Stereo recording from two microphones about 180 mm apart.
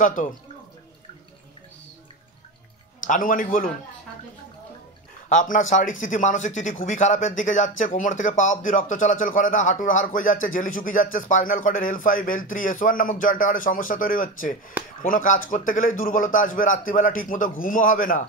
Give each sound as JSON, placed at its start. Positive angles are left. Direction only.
{"t": 0.0, "sound": "speech", "side_deg": 45}
{"t": 3.1, "sound": "speech", "side_deg": 50}
{"t": 5.3, "sound": "speech", "side_deg": 45}